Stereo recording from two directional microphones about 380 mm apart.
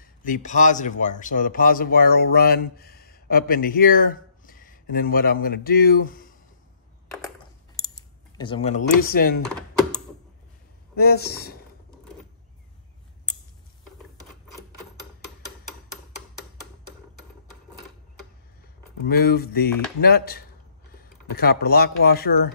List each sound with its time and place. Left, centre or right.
0.0 s a man's voice: left
8.4 s speech: centre
9.4 s a sound: centre
11.0 s speech: left
19.0 s speech: left